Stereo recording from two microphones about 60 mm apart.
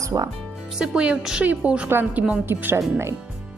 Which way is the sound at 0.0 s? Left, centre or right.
Right.